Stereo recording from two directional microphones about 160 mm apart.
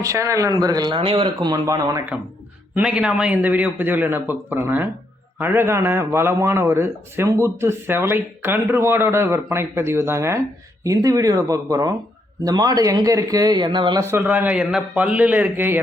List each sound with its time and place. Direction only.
0.0 s a man's voice: 20° right (ahead or behind)
2.7 s a man's voice: 5° right (ahead or behind); by 14.0 s 30° right (ahead or behind)
14.0 s a man's voice: 15° right (ahead or behind)